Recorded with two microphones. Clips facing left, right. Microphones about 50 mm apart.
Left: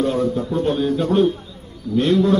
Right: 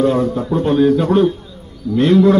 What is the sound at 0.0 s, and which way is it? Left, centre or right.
A man's voice, right.